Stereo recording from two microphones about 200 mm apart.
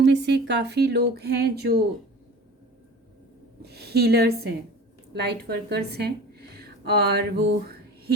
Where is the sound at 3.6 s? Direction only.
55° right (ahead or behind).